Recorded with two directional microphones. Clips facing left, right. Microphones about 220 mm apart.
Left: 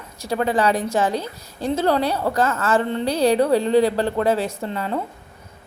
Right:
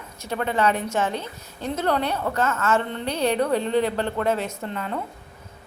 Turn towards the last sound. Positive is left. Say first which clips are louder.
# left 4 dB
turn(degrees=35)  # may be behind; listen again after turning